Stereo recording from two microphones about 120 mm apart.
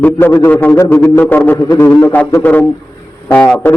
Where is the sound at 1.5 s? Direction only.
30° left (ahead or behind).